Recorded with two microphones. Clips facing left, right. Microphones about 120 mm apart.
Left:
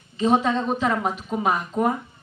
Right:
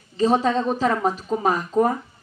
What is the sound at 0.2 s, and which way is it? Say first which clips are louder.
A woman's voice: right 1 dB; 35° right (ahead or behind).